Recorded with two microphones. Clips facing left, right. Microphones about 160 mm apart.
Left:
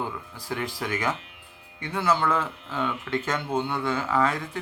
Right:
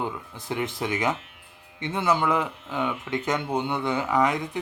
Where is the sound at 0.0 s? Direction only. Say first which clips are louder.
Right 2 dB; 20° right (ahead or behind).